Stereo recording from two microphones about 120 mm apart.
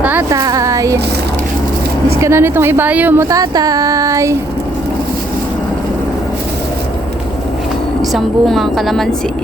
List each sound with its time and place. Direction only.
0.0 s a sound: 15° right (ahead or behind)
0.3 s speech: 30° right (ahead or behind)
2.2 s speech: 20° right (ahead or behind)
3.2 s speech: 30° right (ahead or behind)
8.1 s a woman's voice: centre (ahead or behind)